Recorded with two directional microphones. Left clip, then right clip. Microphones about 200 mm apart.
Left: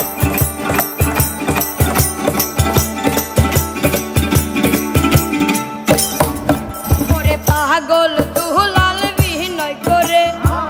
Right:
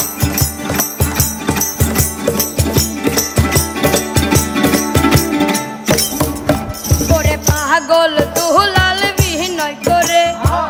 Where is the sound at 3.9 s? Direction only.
20° right (ahead or behind).